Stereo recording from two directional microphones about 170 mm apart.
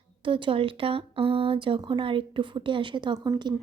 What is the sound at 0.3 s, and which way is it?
Speech, 30° right (ahead or behind).